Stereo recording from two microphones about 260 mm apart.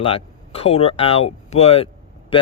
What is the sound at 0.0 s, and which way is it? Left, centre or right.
Speech, left.